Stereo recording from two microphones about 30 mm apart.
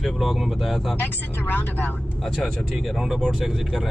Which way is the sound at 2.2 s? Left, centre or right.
Centre.